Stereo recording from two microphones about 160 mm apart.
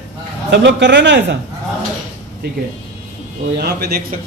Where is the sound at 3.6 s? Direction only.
85° right.